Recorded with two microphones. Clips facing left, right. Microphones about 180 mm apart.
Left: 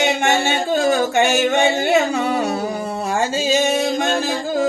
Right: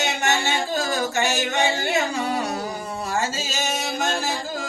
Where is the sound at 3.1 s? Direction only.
55° left (ahead or behind).